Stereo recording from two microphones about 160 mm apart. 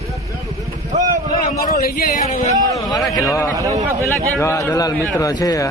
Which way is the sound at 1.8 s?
70° left (ahead or behind).